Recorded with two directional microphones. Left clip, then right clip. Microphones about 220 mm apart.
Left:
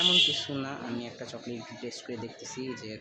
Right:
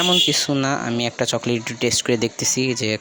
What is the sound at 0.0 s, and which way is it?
Speech, 40° right (ahead or behind).